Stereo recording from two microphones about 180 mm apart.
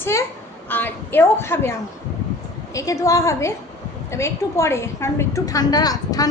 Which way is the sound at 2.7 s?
15° left (ahead or behind).